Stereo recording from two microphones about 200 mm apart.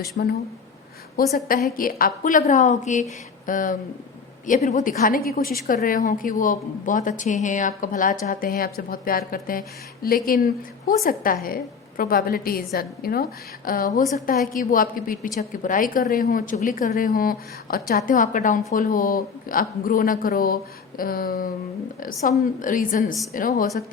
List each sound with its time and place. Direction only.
0.2 s a woman's voice: 55° left (ahead or behind)
22.6 s a woman's voice: 40° left (ahead or behind)